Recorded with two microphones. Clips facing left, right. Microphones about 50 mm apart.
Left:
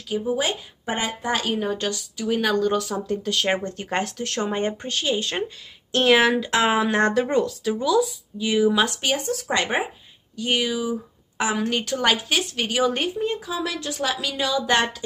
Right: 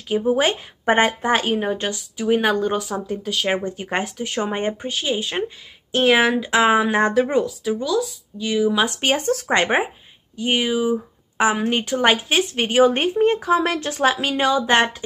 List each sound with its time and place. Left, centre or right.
0.1 s a woman's voice: right
3.1 s speech: centre
4.7 s speech: centre
7.8 s speech: centre
9.0 s speech: right
9.5 s a woman's voice: right
10.3 s a woman's voice: right